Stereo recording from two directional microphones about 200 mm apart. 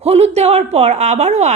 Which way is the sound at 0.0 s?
30° right (ahead or behind).